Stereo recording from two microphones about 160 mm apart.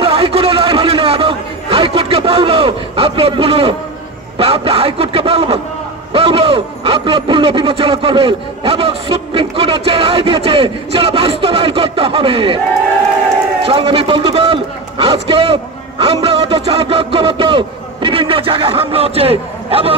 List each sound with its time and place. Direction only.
0.0 s a sound: 35° right (ahead or behind)
4.4 s a man's voice: 40° right (ahead or behind)
13.7 s a man's voice: 35° right (ahead or behind)